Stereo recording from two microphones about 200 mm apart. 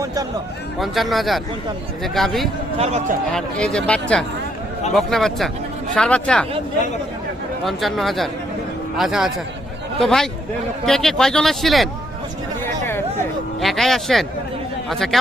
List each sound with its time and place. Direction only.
0.0 s a sound: 15° right (ahead or behind)
0.8 s speech: centre (ahead or behind)
2.7 s speech: 30° right (ahead or behind)
3.3 s speech: 5° left (ahead or behind)
7.6 s speech: centre (ahead or behind)
12.6 s a sound: 10° left (ahead or behind)
13.6 s speech: centre (ahead or behind)